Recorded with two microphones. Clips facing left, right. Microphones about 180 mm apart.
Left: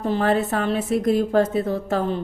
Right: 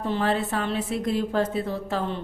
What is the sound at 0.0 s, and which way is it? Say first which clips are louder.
Speech: left 4 dB; 45° left (ahead or behind).